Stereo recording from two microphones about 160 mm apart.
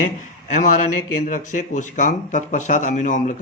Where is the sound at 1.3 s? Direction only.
55° left (ahead or behind).